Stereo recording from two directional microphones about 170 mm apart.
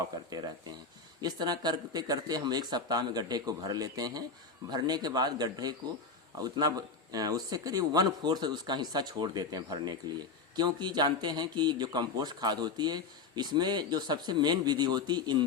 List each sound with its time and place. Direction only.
0.3 s a man's voice: 25° right (ahead or behind)